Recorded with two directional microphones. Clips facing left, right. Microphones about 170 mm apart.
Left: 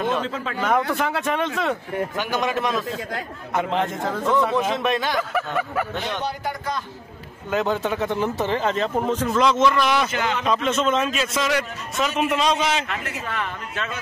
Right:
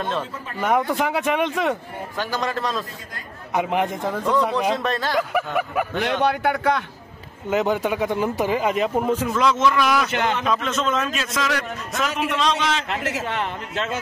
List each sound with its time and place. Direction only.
0.2 s speech: 90° left
0.6 s speech: 15° right (ahead or behind)
2.1 s speech: 20° left (ahead or behind)
3.5 s speech: 15° right (ahead or behind)
4.7 s speech: 20° left (ahead or behind)
5.3 s speech: 10° right (ahead or behind)
6.0 s speech: 65° right (ahead or behind)
7.4 s a man's voice: 15° right (ahead or behind); by 12.7 s 5° left (ahead or behind)
13.3 s speech: 25° right (ahead or behind)